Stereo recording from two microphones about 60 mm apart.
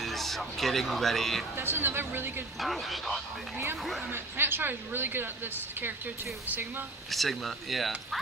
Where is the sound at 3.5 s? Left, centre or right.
Right.